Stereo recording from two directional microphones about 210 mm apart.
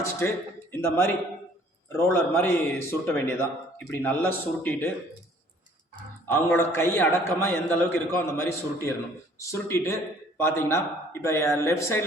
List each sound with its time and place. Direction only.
0.0 s a man's voice: 10° left (ahead or behind)
6.2 s a man's voice: 10° left (ahead or behind)